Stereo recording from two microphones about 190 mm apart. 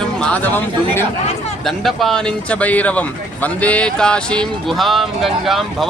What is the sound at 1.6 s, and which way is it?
Speech, centre (ahead or behind).